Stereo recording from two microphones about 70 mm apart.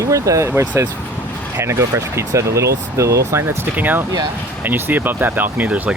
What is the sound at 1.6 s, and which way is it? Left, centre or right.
Speech, right.